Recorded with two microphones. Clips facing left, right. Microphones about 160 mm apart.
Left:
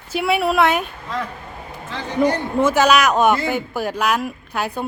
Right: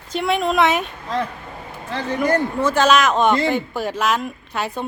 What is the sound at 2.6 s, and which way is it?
Speech, 10° left (ahead or behind).